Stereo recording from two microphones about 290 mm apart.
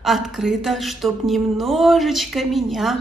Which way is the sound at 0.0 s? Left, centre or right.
Centre.